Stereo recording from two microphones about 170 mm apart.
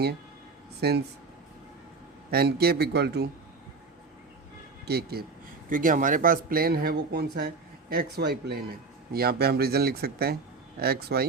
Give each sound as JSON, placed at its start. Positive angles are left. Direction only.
{"t": 0.8, "sound": "speech", "side_deg": -70}
{"t": 2.3, "sound": "speech", "side_deg": -70}
{"t": 4.9, "sound": "speech", "side_deg": -70}
{"t": 5.6, "sound": "a man's voice", "side_deg": -55}